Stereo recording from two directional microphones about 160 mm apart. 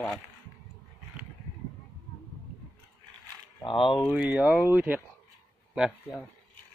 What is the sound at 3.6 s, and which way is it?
Speech, 30° left (ahead or behind).